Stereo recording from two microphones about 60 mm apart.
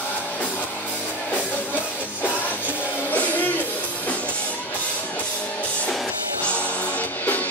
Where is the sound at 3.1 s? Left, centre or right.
Left.